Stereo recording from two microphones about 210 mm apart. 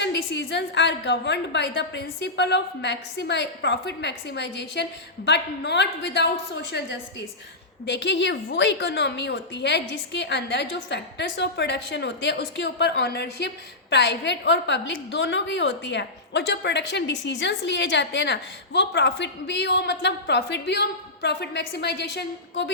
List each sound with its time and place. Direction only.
0.0 s a woman's voice: 55° left (ahead or behind)